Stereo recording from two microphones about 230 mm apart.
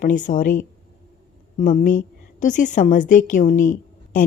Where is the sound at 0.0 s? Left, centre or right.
Left.